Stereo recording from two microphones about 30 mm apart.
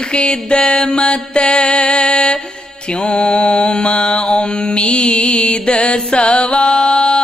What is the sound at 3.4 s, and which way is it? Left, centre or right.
Mantra, left.